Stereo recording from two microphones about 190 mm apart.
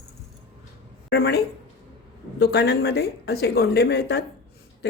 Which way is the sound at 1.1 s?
60° left (ahead or behind).